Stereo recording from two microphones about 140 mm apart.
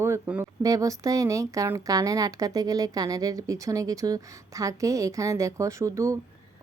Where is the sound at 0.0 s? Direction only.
15° right (ahead or behind).